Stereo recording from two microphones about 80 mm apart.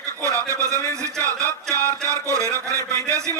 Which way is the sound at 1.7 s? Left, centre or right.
Right.